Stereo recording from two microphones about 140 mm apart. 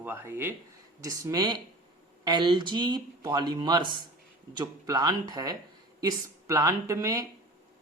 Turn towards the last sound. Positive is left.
turn(degrees=-25)  # may be behind; listen again after turning